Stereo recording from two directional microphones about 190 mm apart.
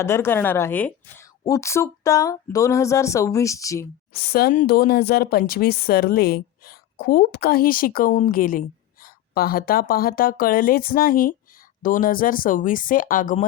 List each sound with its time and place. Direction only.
0.0 s a woman's voice: 15° left (ahead or behind)
4.2 s speech: 55° left (ahead or behind)